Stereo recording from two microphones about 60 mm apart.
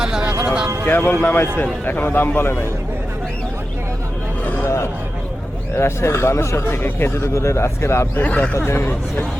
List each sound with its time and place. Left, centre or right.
0.0 s music: centre
0.9 s speech: left
4.6 s speech: left
6.8 s speech: left
7.3 s speech: left
8.2 s speech: left
8.5 s speech: left